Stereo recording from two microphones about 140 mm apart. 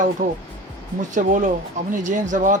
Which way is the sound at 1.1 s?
65° right (ahead or behind).